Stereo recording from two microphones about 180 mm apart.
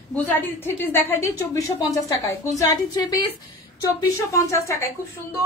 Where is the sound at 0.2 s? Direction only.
10° left (ahead or behind).